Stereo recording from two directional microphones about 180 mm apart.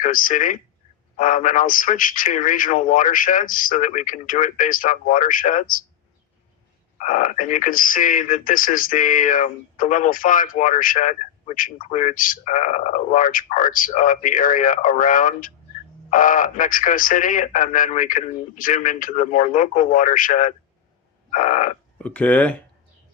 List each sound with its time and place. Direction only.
0.0 s speech: 50° left (ahead or behind)
7.0 s speech: 45° left (ahead or behind)
21.2 s a sound: 45° left (ahead or behind)
21.9 s speech: 5° left (ahead or behind)